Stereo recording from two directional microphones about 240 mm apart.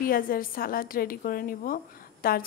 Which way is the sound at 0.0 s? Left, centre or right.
Left.